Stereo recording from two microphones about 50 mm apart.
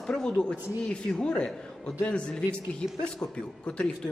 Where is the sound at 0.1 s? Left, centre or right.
Centre.